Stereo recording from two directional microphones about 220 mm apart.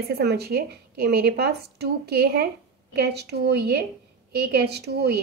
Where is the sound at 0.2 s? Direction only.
45° right (ahead or behind).